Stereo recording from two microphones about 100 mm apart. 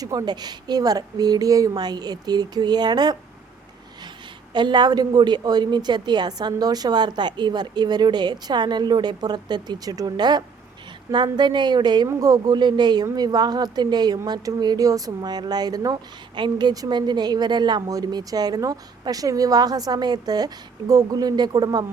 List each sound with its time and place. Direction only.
0.0 s a woman's voice: 35° right (ahead or behind)
4.5 s a woman's voice: 50° right (ahead or behind)